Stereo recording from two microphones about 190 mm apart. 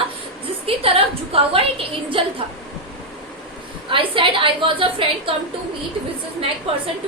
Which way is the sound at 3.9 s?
25° right (ahead or behind).